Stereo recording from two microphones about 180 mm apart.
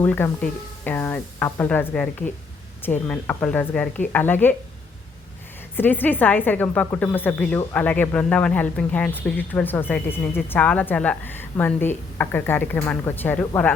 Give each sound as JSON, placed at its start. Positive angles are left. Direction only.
{"t": 0.0, "sound": "a woman's voice", "side_deg": 10}
{"t": 5.7, "sound": "a woman's voice", "side_deg": 10}